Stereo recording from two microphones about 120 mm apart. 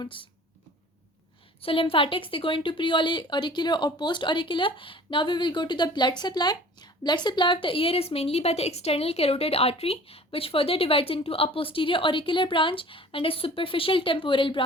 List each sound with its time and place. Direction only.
0.0 s speech: 45° left (ahead or behind)
1.6 s speech: 50° left (ahead or behind)